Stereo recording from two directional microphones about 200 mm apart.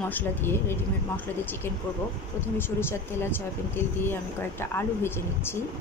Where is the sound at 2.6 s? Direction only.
10° left (ahead or behind).